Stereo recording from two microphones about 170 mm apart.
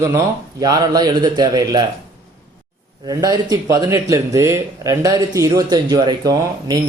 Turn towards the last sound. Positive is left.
turn(degrees=-25)  # may be behind; listen again after turning